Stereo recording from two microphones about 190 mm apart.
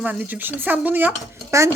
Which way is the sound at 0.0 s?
10° right (ahead or behind).